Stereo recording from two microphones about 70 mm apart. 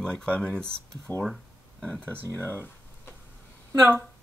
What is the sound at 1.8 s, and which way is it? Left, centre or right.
Speech, centre.